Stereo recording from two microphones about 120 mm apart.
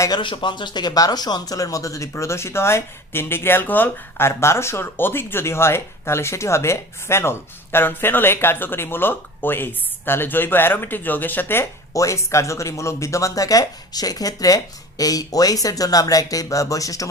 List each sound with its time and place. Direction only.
0.2 s speech: 40° left (ahead or behind)